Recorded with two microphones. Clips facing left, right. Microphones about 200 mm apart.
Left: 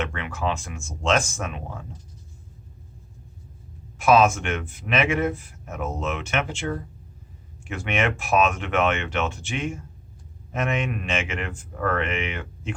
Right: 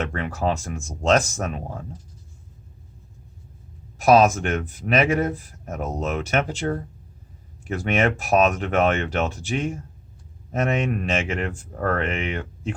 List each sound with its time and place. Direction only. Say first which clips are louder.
0.0 s speech: right 3 dB; 40° right (ahead or behind)
3.9 s speech: right 2 dB; 40° right (ahead or behind)